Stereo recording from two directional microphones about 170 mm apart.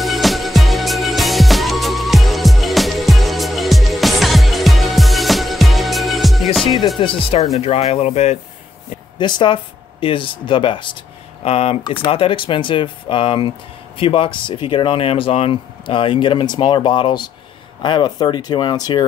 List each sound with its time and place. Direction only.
0.0 s music: centre (ahead or behind)
6.6 s music: 25° left (ahead or behind)
7.0 s speech: 30° left (ahead or behind)
9.2 s speech: 30° left (ahead or behind)